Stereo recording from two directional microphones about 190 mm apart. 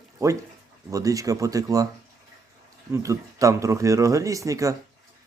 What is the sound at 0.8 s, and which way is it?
Speech, 15° right (ahead or behind).